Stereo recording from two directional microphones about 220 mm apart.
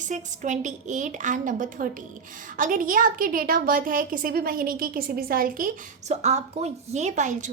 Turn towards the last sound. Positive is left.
turn(degrees=-35)  # may be behind; listen again after turning